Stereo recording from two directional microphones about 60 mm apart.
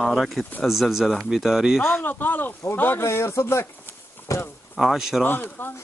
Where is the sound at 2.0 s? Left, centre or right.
Left.